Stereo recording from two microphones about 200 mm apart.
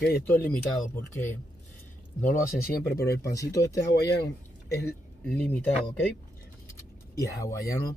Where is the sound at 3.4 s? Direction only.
15° left (ahead or behind).